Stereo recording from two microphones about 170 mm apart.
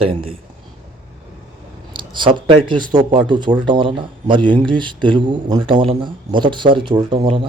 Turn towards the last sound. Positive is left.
turn(degrees=-30)  # may be behind; listen again after turning